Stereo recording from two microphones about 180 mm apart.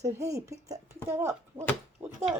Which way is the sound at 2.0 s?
10° right (ahead or behind).